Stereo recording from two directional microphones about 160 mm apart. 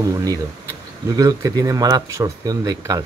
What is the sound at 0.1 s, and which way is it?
Speech, 20° right (ahead or behind).